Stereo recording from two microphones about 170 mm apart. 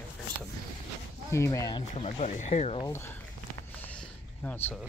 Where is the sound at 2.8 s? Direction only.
15° left (ahead or behind).